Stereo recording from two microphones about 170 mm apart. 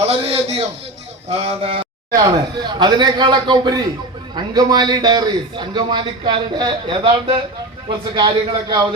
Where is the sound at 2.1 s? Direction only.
25° right (ahead or behind).